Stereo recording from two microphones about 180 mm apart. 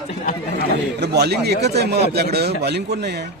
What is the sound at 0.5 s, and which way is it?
A man's voice, 65° right (ahead or behind).